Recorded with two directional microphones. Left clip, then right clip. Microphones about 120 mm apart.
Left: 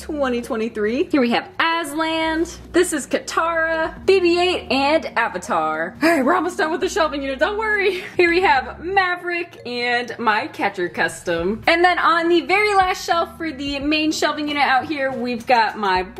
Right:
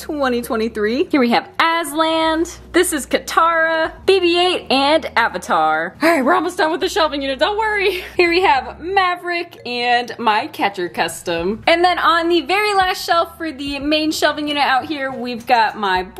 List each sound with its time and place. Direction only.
0.2 s a woman's voice: 25° right (ahead or behind); by 16.0 s 10° right (ahead or behind)